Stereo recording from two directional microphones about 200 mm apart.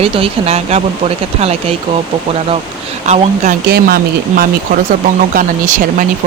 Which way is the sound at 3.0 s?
35° right (ahead or behind).